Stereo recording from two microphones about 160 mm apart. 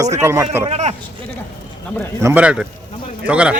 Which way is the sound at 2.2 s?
10° right (ahead or behind).